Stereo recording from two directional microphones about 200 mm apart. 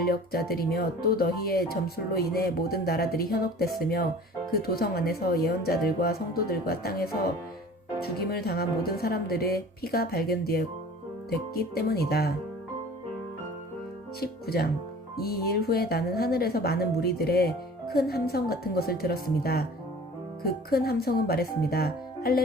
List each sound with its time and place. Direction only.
0.0 s speech: 50° left (ahead or behind)
14.2 s speech: 50° left (ahead or behind)